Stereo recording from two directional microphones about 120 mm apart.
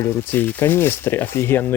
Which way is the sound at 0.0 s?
15° left (ahead or behind).